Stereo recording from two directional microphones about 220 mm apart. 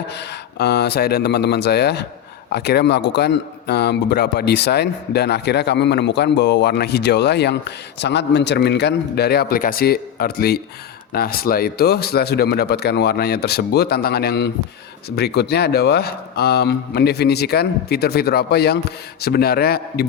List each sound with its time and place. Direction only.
0.1 s a man's voice: 50° left (ahead or behind)